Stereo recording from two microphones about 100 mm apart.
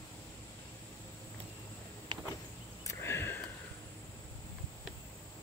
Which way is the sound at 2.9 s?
25° left (ahead or behind).